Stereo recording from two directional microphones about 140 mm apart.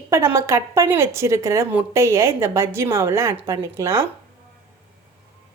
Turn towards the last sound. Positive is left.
turn(degrees=-20)  # may be behind; listen again after turning